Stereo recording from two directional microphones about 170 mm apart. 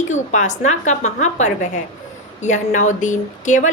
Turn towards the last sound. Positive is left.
turn(degrees=45)  # may be behind; listen again after turning